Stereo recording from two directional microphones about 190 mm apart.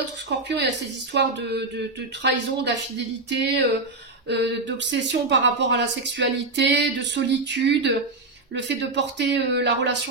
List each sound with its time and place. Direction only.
0.3 s speech: 65° right (ahead or behind)